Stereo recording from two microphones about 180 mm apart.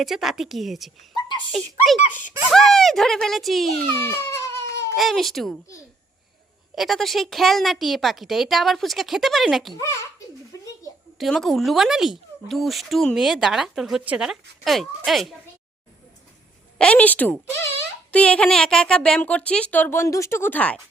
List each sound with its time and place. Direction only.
0.0 s speech: centre (ahead or behind)
4.1 s baby cry: 15° left (ahead or behind)
4.9 s speech: centre (ahead or behind)
6.7 s speech: centre (ahead or behind)
9.8 s speech: 15° left (ahead or behind)
11.2 s speech: centre (ahead or behind)
16.7 s speech: 5° left (ahead or behind)